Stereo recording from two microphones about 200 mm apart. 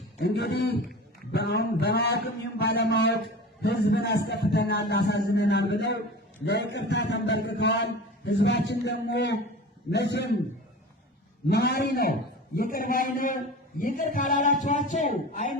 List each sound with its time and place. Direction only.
0.2 s speech: 55° left (ahead or behind)
11.4 s a man's voice: 55° left (ahead or behind)